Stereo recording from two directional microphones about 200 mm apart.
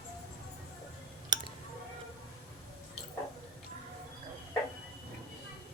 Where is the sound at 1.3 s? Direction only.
20° right (ahead or behind).